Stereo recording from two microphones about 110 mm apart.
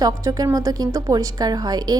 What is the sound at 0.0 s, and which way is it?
A woman's voice, 35° right (ahead or behind).